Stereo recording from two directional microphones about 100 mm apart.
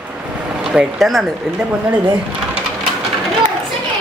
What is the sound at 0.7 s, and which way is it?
Speech, centre (ahead or behind).